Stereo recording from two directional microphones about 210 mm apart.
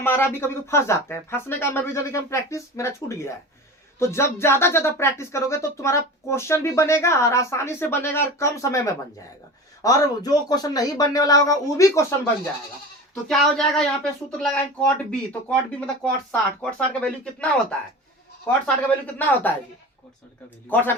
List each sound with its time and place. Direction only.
0.0 s speech: 10° left (ahead or behind)
13.2 s speech: centre (ahead or behind)
20.7 s speech: 10° left (ahead or behind)